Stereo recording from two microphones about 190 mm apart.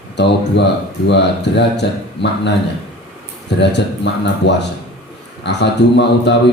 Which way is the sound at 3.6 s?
65° left (ahead or behind).